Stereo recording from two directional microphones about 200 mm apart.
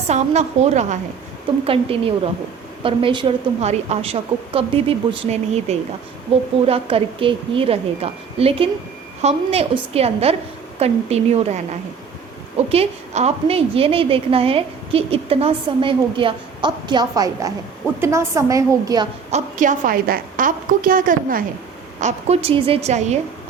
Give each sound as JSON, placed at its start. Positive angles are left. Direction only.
{"t": 0.1, "sound": "a woman's voice", "side_deg": -35}
{"t": 12.6, "sound": "a woman's voice", "side_deg": -30}
{"t": 19.3, "sound": "a woman's voice", "side_deg": -40}